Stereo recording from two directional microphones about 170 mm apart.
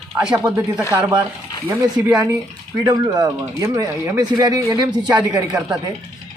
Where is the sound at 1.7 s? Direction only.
15° right (ahead or behind).